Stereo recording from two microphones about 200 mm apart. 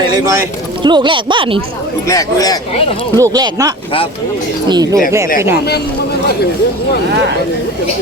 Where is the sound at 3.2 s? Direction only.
20° right (ahead or behind).